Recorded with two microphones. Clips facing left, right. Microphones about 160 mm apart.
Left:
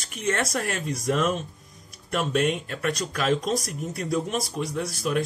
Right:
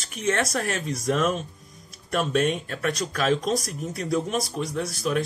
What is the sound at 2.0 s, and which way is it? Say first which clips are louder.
Speech: right 1 dB; 10° left (ahead or behind).